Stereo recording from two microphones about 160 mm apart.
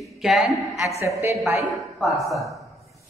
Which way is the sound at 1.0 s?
20° right (ahead or behind).